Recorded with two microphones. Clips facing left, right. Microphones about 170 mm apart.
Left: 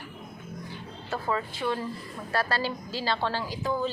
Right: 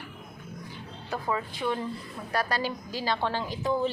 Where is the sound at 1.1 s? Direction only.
10° right (ahead or behind).